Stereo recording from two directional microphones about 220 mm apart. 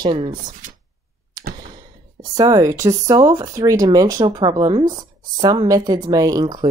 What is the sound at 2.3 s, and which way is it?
Speech, 15° right (ahead or behind).